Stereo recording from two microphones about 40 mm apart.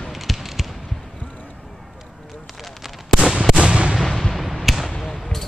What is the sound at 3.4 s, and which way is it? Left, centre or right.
Artillery fire, centre.